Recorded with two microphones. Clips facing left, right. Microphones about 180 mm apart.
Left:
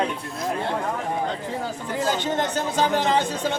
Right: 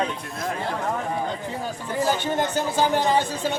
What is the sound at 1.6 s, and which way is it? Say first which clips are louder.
Speech: right 2 dB; 15° right (ahead or behind).